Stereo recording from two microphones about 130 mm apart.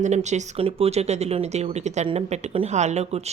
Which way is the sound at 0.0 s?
65° right (ahead or behind).